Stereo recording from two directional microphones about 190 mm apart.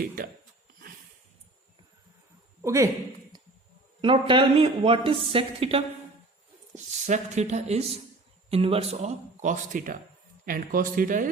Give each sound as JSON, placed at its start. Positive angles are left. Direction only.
{"t": 2.6, "sound": "a man's voice", "side_deg": -15}
{"t": 4.0, "sound": "a woman's voice", "side_deg": -25}